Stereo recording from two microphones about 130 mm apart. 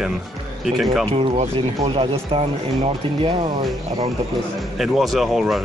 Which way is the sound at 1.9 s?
45° right (ahead or behind).